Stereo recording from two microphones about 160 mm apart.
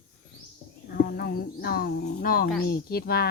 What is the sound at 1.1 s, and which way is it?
Speech, 75° left (ahead or behind).